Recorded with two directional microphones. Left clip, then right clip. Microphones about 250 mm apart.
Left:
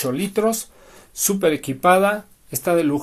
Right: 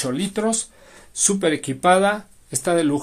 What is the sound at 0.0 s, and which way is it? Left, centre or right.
Speech, centre.